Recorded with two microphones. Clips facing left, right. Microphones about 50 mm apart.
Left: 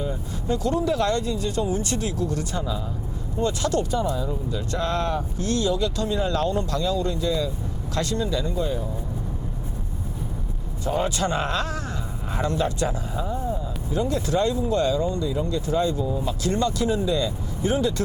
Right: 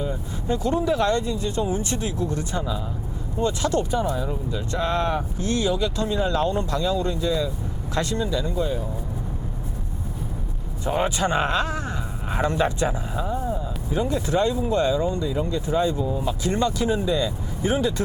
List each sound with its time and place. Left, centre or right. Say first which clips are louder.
0.4 s speech: right 1 dB; right
4.7 s speech: right 2 dB; right
10.8 s speech: right 1 dB; right